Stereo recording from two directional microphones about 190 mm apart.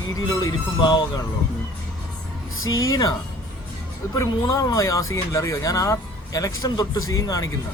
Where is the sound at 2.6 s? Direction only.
90° left.